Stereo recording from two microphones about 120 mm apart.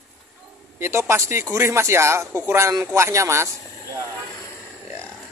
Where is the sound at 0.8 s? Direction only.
25° right (ahead or behind).